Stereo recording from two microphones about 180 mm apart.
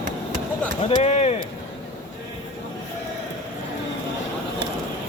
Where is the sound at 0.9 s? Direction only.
35° left (ahead or behind).